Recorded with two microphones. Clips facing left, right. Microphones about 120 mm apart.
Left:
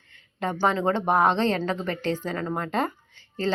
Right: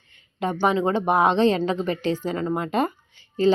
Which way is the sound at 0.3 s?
15° right (ahead or behind).